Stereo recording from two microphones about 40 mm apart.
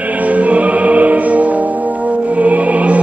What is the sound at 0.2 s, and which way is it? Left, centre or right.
Music, right.